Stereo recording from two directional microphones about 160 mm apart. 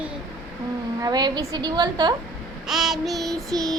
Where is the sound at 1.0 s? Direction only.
25° right (ahead or behind).